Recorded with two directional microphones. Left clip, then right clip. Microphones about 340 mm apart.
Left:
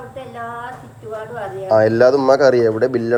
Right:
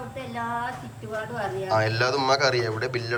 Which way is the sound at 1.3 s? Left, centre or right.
Centre.